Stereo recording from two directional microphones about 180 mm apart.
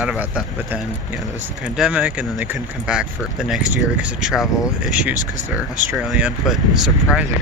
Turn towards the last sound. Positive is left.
turn(degrees=-5)  # may be behind; listen again after turning